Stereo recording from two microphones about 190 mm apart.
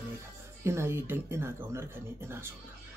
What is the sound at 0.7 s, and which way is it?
Speech, 15° right (ahead or behind).